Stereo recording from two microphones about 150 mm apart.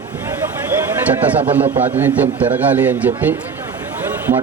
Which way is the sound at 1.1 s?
10° right (ahead or behind).